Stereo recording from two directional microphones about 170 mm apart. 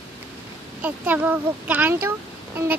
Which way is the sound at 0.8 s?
10° right (ahead or behind).